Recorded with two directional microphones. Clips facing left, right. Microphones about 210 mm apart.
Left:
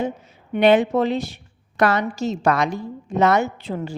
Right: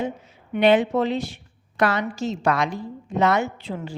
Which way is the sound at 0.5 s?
45° left (ahead or behind).